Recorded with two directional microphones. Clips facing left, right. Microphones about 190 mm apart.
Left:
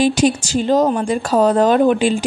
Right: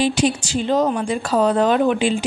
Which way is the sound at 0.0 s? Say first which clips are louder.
Left 4 dB; 45° left (ahead or behind).